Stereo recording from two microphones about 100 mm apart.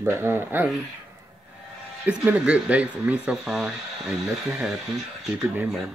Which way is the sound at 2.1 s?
15° right (ahead or behind).